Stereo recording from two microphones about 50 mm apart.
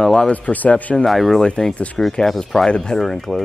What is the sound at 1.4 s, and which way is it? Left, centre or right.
Speech, centre.